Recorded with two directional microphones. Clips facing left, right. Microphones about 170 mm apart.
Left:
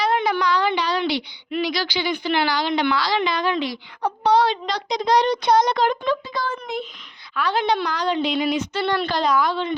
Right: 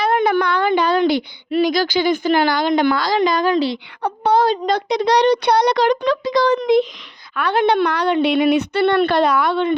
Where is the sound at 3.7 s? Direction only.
70° right (ahead or behind); by 7.2 s 85° right.